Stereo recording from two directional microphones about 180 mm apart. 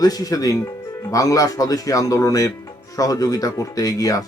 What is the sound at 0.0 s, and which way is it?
Speech, 20° left (ahead or behind).